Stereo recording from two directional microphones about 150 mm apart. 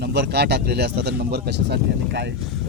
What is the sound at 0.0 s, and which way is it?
Speech, 90° right.